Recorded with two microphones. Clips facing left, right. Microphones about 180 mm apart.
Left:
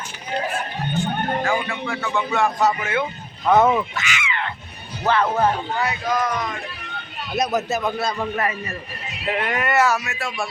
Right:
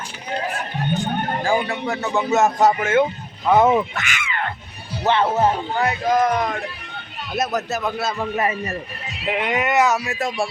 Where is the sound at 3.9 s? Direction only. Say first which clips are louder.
Even; 50° right (ahead or behind).